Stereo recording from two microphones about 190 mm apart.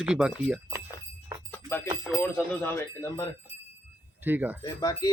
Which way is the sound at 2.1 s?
5° left (ahead or behind).